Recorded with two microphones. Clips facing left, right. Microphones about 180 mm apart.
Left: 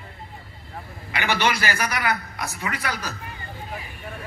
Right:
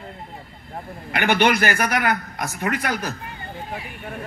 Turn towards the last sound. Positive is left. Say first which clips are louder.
# right 5 dB
turn(degrees=-50)  # may be behind; listen again after turning